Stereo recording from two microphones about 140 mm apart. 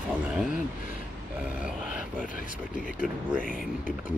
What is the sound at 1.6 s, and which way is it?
Grunt, 10° right (ahead or behind).